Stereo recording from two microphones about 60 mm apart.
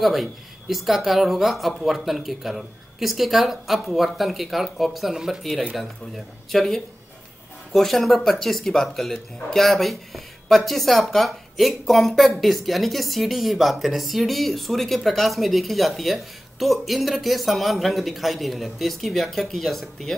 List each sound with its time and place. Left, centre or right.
0.0 s speech: centre